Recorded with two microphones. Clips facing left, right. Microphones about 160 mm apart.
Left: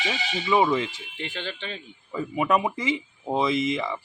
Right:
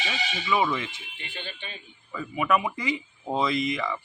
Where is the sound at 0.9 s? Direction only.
90° left.